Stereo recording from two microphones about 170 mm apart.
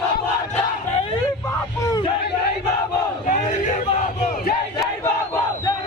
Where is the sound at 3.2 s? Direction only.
45° left (ahead or behind).